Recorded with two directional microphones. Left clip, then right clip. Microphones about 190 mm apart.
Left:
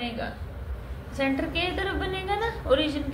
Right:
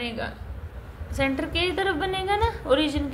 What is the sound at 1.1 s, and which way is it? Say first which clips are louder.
A woman's voice: right 1 dB; 40° right (ahead or behind).